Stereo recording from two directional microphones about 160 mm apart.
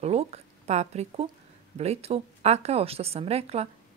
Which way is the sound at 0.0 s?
40° right (ahead or behind).